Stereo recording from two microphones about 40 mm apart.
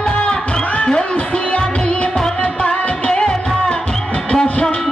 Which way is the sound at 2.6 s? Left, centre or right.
Left.